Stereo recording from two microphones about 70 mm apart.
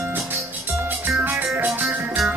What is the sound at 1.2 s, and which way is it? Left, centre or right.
Music, right.